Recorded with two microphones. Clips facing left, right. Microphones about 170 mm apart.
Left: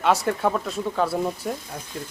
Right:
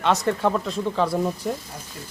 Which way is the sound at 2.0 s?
55° left (ahead or behind).